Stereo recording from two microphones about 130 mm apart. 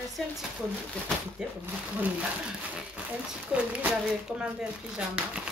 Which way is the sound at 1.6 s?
10° right (ahead or behind).